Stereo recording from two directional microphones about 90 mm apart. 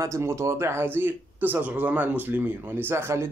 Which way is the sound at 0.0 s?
30° right (ahead or behind).